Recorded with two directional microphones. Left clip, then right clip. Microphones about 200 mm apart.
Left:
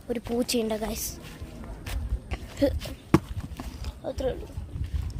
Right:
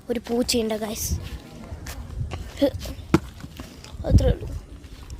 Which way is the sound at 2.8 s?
5° left (ahead or behind).